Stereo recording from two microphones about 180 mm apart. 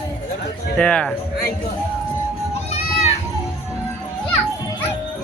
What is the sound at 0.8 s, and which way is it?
Speech, 5° left (ahead or behind).